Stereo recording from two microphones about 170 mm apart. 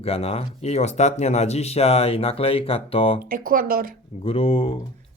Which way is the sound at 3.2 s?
55° right (ahead or behind).